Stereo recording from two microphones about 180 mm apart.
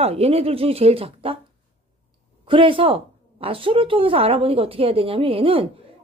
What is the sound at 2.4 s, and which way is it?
A woman's voice, 30° right (ahead or behind).